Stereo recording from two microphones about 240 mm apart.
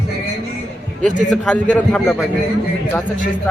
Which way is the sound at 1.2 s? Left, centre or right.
Centre.